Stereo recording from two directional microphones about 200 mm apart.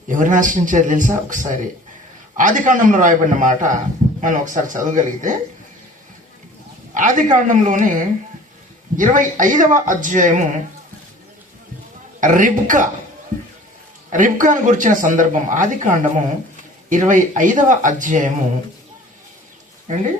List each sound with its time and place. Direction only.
0.1 s speech: 40° right (ahead or behind)
6.9 s speech: 40° right (ahead or behind)
9.0 s speech: 40° right (ahead or behind)
12.2 s speech: 40° right (ahead or behind)
14.1 s speech: 40° right (ahead or behind)